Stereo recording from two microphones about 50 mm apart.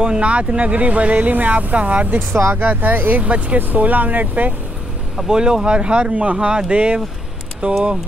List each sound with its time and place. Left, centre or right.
0.0 s speech: right
5.3 s speech: centre